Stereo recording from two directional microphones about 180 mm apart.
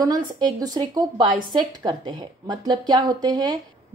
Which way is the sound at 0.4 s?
20° right (ahead or behind).